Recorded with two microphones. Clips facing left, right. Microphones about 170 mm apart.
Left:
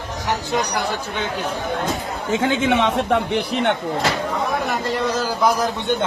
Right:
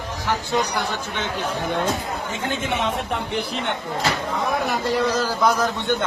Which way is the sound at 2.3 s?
90° left.